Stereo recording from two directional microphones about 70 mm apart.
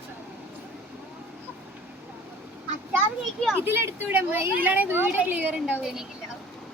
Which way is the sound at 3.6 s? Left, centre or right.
Right.